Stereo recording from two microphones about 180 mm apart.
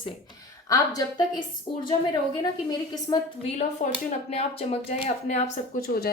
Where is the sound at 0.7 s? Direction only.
20° left (ahead or behind).